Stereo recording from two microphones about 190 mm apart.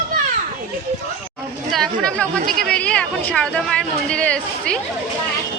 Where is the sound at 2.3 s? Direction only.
45° right (ahead or behind).